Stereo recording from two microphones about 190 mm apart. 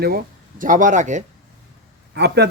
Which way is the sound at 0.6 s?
45° right (ahead or behind).